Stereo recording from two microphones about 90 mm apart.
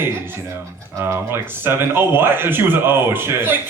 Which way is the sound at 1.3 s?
25° right (ahead or behind).